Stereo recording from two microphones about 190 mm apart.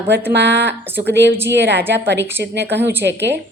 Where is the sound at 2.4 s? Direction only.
60° right (ahead or behind).